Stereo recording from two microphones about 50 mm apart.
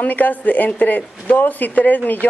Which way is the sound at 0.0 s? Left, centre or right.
Left.